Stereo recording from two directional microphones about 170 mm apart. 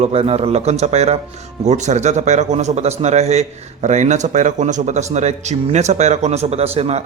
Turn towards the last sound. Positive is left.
turn(degrees=-40)  # may be behind; listen again after turning